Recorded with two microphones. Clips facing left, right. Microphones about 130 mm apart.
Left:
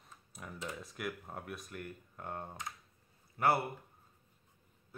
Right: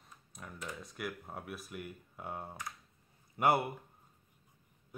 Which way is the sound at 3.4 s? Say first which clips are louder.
Right 1 dB; 20° right (ahead or behind).